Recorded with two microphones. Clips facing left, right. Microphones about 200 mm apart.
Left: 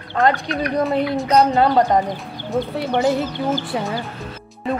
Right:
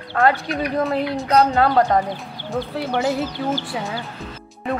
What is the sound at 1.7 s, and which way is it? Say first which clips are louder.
Speech: left 1 dB; 20° left (ahead or behind).